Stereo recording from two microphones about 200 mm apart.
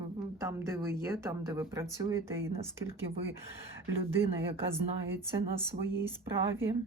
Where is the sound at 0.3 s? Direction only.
15° right (ahead or behind).